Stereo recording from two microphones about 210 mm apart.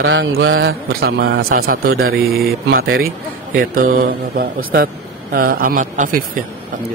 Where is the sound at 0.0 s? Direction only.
65° right (ahead or behind).